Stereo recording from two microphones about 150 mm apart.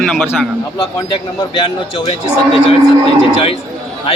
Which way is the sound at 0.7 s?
30° left (ahead or behind).